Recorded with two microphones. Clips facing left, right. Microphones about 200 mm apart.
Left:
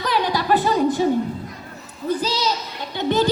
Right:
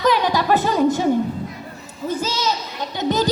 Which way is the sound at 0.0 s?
45° right (ahead or behind).